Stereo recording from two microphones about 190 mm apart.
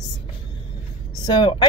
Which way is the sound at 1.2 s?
25° left (ahead or behind).